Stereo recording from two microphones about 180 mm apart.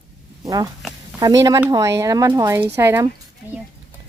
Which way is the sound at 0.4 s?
20° right (ahead or behind).